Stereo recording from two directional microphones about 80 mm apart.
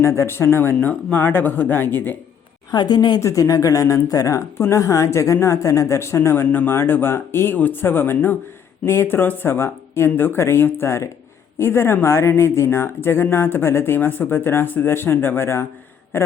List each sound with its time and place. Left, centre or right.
0.0 s speech: left
2.7 s a woman's voice: left
3.2 s speech: left